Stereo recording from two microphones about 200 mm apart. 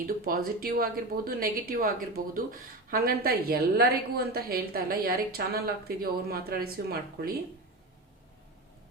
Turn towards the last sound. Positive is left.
turn(degrees=-50)  # may be behind; listen again after turning